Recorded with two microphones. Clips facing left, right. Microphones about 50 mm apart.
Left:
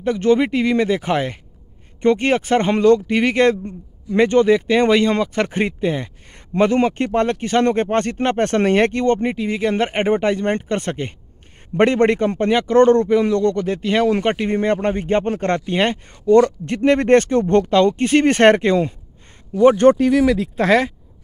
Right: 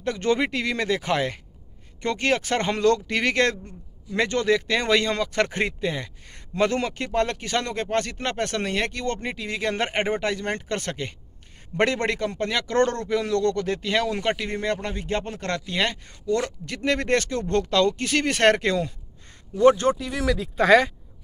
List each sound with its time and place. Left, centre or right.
0.0 s speech: centre
6.8 s speech: left
8.5 s speech: left
9.0 s speech: left
9.4 s speech: centre
9.9 s speech: left
19.8 s speech: left
20.5 s speech: centre